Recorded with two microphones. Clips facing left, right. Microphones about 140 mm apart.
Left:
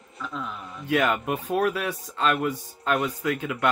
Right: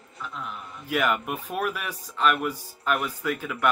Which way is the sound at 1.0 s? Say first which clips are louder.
Left 1 dB; 30° left (ahead or behind).